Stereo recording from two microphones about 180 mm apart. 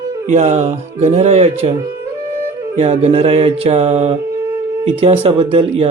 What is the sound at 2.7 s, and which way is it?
Speech, 35° right (ahead or behind).